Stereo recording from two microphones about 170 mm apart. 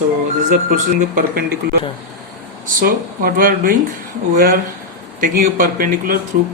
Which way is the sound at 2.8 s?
55° right (ahead or behind).